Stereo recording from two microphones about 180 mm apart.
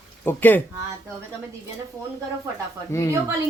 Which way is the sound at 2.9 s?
15° left (ahead or behind).